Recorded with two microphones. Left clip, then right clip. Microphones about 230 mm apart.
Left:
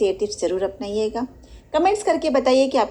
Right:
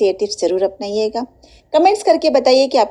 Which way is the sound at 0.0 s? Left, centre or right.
Right.